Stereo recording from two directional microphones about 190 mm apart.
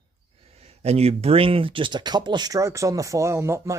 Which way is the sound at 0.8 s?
35° right (ahead or behind).